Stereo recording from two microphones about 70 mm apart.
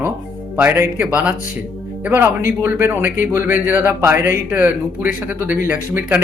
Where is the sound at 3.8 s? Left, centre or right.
Right.